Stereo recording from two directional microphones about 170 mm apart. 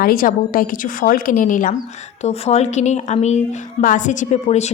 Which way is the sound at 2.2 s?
40° left (ahead or behind).